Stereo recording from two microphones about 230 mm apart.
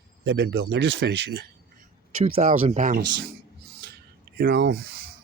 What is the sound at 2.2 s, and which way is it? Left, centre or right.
Speech, right.